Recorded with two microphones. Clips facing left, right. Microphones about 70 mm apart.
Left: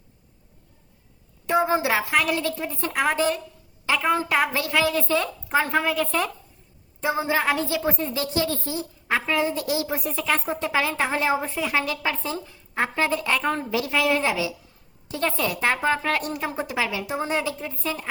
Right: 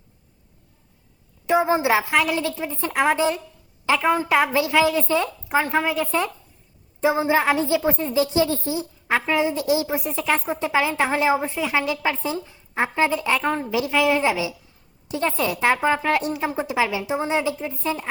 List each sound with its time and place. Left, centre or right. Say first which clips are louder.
1.5 s a woman's voice: right 3 dB; centre
5.5 s a woman's voice: even; centre
7.3 s a woman's voice: right 4 dB; right
8.8 s a sound: right 2 dB; centre
9.3 s speech: right 4 dB; centre
11.6 s a woman's voice: right 2 dB; centre